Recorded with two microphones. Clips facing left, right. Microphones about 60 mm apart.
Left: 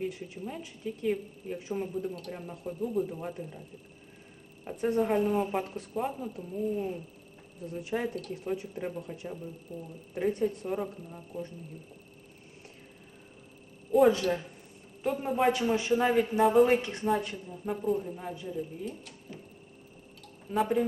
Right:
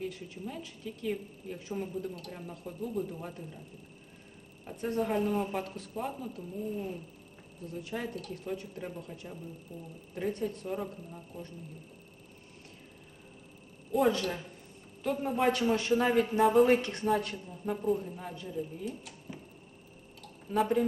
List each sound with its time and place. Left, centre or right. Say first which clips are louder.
0.0 s a woman's voice: left 3 dB; centre
4.8 s a woman's voice: left 4 dB; centre
5.5 s a woman's voice: left 4 dB; centre
6.7 s a woman's voice: left 4 dB; centre
7.6 s a woman's voice: left 5 dB; centre
14.1 s a woman's voice: left 5 dB; centre
20.2 s tick-tock: even; centre